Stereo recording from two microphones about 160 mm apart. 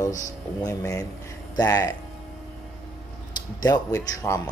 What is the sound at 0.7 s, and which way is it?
Speech, 20° left (ahead or behind).